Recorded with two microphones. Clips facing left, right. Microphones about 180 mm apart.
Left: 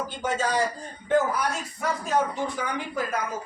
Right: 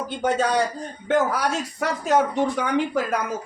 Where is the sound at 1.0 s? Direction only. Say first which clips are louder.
Right 2 dB; 80° right.